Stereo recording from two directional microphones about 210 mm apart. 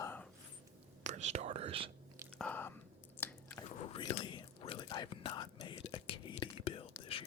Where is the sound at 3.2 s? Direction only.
10° left (ahead or behind).